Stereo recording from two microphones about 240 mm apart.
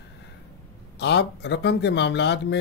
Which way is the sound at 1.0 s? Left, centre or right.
Left.